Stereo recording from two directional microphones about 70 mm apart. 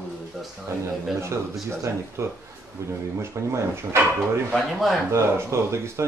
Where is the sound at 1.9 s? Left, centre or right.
Right.